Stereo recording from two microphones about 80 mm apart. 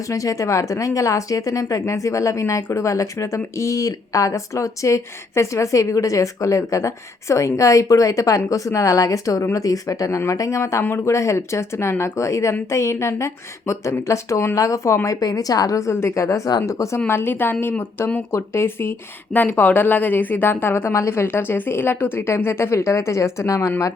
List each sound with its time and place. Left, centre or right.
0.1 s speech: left
17.1 s speech: left